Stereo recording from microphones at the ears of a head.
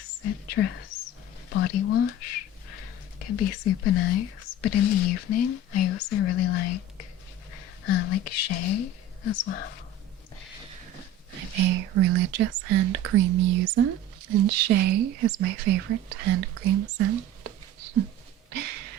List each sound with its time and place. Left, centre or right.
0.0 s speech: left
11.3 s speech: right
18.5 s a sound: right